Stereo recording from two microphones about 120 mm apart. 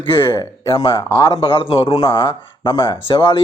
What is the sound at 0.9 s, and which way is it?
Speech, 25° left (ahead or behind).